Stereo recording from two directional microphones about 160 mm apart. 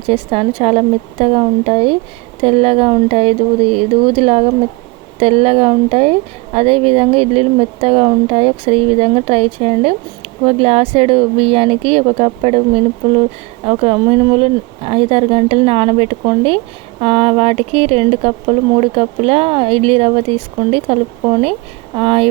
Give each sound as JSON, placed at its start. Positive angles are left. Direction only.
{"t": 0.0, "sound": "speech", "side_deg": -35}